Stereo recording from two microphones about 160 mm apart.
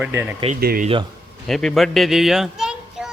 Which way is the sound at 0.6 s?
75° right (ahead or behind).